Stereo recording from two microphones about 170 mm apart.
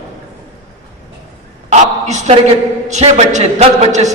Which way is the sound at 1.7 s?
45° right (ahead or behind).